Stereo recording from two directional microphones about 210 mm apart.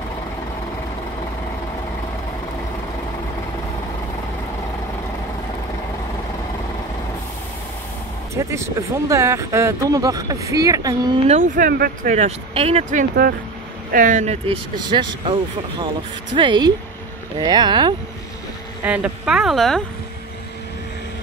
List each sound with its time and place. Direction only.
8.4 s speech: 15° right (ahead or behind)
11.2 s speech: 35° right (ahead or behind); by 17.9 s 20° right (ahead or behind)
18.9 s speech: 5° right (ahead or behind)